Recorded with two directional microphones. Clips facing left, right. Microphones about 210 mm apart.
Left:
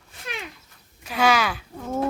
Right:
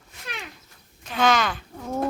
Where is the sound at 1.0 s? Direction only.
10° left (ahead or behind).